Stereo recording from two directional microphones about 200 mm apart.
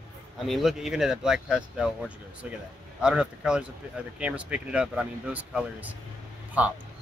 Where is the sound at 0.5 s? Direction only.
Centre (ahead or behind).